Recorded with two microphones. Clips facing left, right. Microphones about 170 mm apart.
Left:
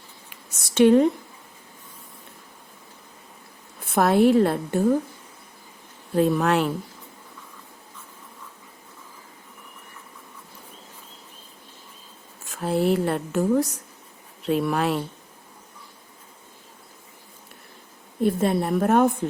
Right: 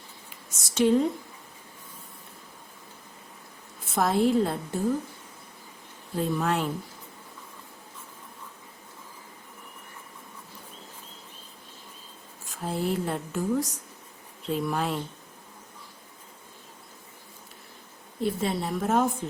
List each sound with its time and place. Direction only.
0.3 s a sound: 65° left (ahead or behind)
3.8 s speech: 65° left (ahead or behind)
6.1 s speech: 75° left (ahead or behind)
12.5 s speech: 70° left (ahead or behind)
18.2 s a woman's voice: 55° left (ahead or behind)